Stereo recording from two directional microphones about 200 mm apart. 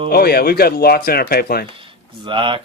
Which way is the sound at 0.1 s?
50° left (ahead or behind).